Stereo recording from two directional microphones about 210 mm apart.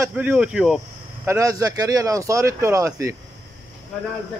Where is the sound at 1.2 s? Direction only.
15° right (ahead or behind).